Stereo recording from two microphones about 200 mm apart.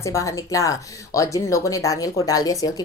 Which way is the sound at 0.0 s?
15° left (ahead or behind).